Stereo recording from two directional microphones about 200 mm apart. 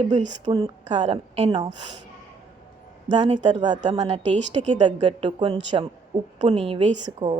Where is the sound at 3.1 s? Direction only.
25° right (ahead or behind).